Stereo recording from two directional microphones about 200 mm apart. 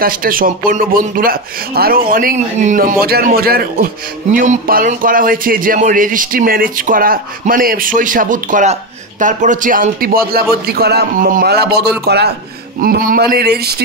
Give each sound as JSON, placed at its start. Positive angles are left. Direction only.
{"t": 0.0, "sound": "a man's voice", "side_deg": -45}